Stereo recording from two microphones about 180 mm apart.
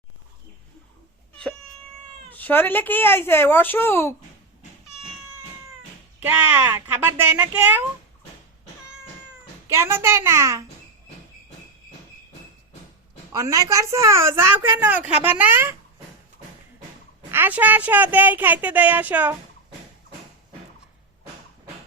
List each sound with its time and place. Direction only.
2.3 s a woman's voice: 10° left (ahead or behind)
6.1 s a woman's voice: 10° right (ahead or behind)
9.7 s a woman's voice: 15° right (ahead or behind)
13.3 s a woman's voice: 15° right (ahead or behind)
17.3 s a woman's voice: 10° right (ahead or behind)